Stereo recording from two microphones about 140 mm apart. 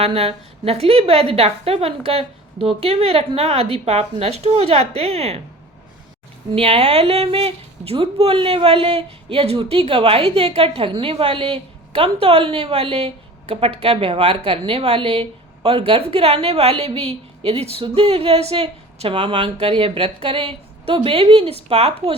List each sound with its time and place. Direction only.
0.0 s a woman's voice: 45° right (ahead or behind)
6.5 s a woman's voice: 50° right (ahead or behind)